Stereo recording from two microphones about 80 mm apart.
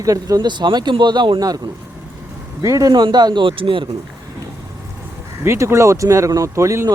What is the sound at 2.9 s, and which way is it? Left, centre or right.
Speech, right.